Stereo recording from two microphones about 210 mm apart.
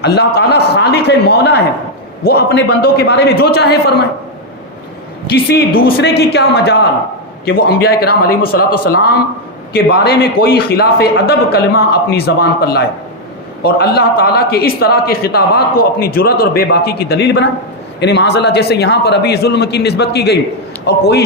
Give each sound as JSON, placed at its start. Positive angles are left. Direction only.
{"t": 0.0, "sound": "a man's voice", "side_deg": 50}
{"t": 5.3, "sound": "a man's voice", "side_deg": 50}